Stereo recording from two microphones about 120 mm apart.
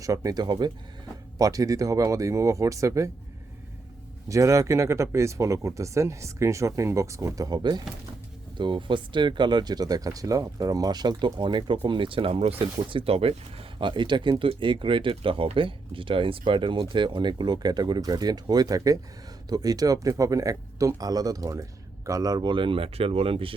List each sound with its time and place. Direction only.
0.0 s speech: 30° right (ahead or behind)
4.3 s speech: 25° right (ahead or behind); by 23.6 s 50° right (ahead or behind)